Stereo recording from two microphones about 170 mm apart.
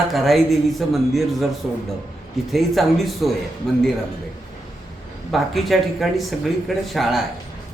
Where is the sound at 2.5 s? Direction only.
Centre (ahead or behind).